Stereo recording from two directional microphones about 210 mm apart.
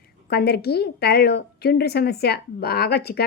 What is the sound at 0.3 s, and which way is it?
A woman's voice, 50° left (ahead or behind).